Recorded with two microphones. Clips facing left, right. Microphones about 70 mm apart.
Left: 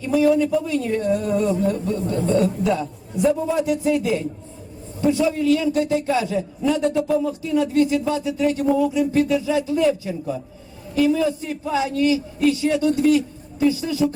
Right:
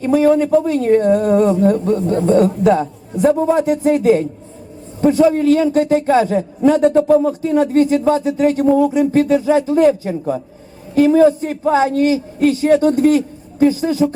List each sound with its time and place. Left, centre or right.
0.0 s a man's voice: right